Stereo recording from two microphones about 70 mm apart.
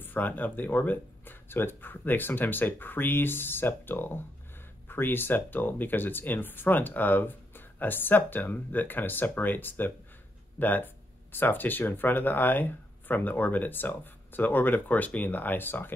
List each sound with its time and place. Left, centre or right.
0.0 s speech: left